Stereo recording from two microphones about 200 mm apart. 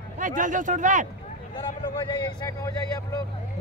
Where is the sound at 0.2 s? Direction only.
40° right (ahead or behind).